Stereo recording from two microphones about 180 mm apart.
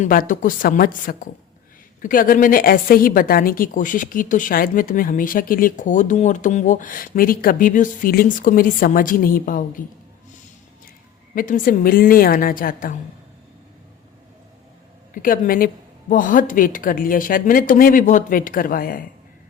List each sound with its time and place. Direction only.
0.0 s a woman's voice: 50° left (ahead or behind)
11.3 s a woman's voice: 50° left (ahead or behind)
15.1 s a woman's voice: 50° left (ahead or behind)